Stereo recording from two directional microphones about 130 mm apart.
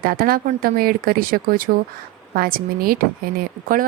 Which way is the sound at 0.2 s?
90° right.